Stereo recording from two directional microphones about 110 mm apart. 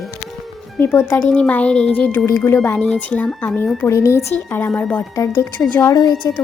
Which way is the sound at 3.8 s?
25° left (ahead or behind).